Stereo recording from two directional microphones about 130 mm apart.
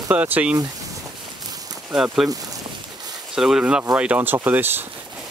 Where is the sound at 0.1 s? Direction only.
10° right (ahead or behind).